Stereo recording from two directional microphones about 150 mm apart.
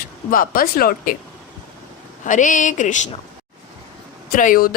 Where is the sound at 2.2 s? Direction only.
60° left (ahead or behind).